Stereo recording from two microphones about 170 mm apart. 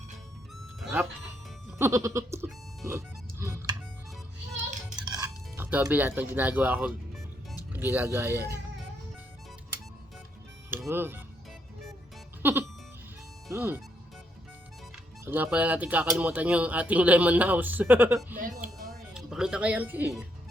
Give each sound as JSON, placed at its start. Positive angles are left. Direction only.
{"t": 0.8, "sound": "music", "side_deg": -5}
{"t": 1.8, "sound": "music", "side_deg": -15}
{"t": 5.1, "sound": "speech", "side_deg": -15}
{"t": 10.7, "sound": "speech", "side_deg": -10}
{"t": 12.4, "sound": "music", "side_deg": -10}
{"t": 13.5, "sound": "speech", "side_deg": -15}
{"t": 15.2, "sound": "speech", "side_deg": -10}